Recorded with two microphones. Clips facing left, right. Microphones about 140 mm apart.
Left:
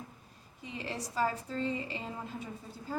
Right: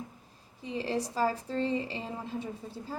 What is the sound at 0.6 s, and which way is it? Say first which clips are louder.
A woman's voice: right 7 dB; 30° right (ahead or behind).